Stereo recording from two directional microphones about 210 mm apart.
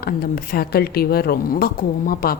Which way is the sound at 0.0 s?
45° left (ahead or behind).